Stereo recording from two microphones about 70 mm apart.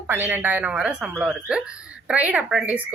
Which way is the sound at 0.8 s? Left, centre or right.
Centre.